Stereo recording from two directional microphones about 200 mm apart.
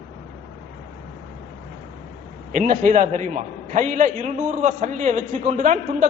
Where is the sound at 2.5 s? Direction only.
40° right (ahead or behind).